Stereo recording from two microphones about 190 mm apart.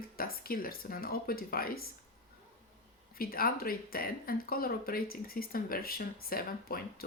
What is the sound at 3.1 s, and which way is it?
Speech, 50° left (ahead or behind).